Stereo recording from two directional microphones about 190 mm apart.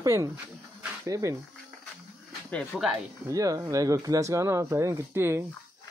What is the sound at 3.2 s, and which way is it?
Speech, 15° right (ahead or behind).